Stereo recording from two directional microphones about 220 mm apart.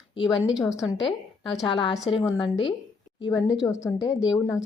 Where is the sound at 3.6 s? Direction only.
15° left (ahead or behind).